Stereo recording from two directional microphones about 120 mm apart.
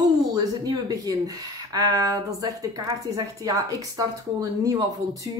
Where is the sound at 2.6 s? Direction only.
30° right (ahead or behind).